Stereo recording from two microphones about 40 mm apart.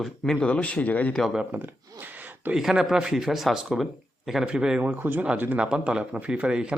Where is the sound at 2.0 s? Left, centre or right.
Right.